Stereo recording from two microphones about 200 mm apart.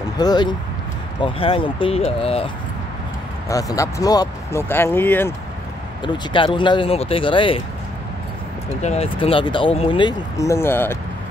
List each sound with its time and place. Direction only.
0.2 s speech: 20° left (ahead or behind)
3.4 s speech: 15° left (ahead or behind)
6.0 s speech: 25° left (ahead or behind)
8.8 s speech: 30° left (ahead or behind); by 11.0 s 10° left (ahead or behind)